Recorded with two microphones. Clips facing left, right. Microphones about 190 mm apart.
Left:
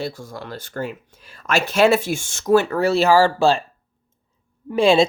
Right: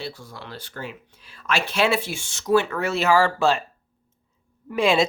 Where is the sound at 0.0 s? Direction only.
45° left (ahead or behind).